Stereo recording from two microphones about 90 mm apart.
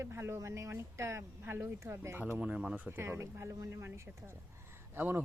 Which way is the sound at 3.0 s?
30° right (ahead or behind).